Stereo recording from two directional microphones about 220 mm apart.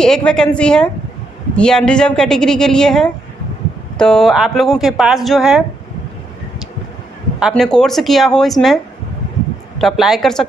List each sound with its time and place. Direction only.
0.0 s speech: 5° left (ahead or behind)
7.3 s speech: centre (ahead or behind)
9.8 s speech: centre (ahead or behind)